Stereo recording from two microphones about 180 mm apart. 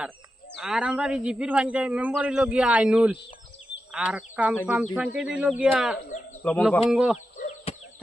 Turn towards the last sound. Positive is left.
turn(degrees=40)  # may be behind; listen again after turning